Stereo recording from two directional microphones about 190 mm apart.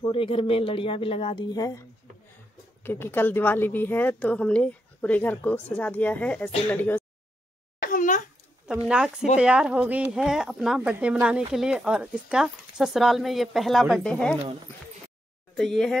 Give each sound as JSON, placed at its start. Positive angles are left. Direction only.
{"t": 0.0, "sound": "a woman's voice", "side_deg": 25}
{"t": 7.8, "sound": "a sound", "side_deg": 45}
{"t": 8.8, "sound": "speech", "side_deg": -5}
{"t": 15.5, "sound": "speech", "side_deg": 0}